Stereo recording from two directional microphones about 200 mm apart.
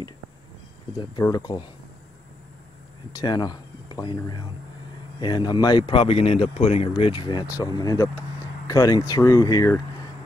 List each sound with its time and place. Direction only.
1.2 s speech: 20° left (ahead or behind)
3.1 s speech: 20° left (ahead or behind)